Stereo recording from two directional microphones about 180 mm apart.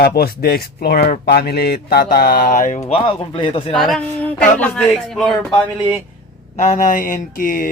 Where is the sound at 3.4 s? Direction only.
30° left (ahead or behind).